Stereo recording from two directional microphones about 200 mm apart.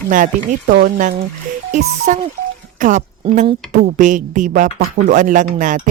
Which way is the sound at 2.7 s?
40° right (ahead or behind).